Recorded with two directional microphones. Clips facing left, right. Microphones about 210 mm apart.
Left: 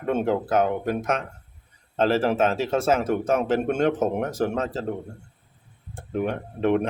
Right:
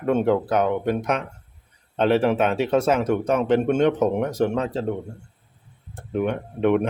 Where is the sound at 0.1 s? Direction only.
Centre (ahead or behind).